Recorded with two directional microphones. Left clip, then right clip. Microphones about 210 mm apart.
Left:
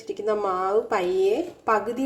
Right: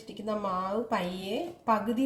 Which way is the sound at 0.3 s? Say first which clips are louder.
Left 7 dB; 25° left (ahead or behind).